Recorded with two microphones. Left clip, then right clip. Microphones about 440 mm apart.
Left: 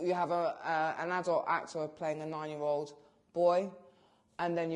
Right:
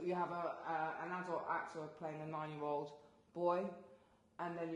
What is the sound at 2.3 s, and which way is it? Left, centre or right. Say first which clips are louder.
Speech: left 4 dB; left.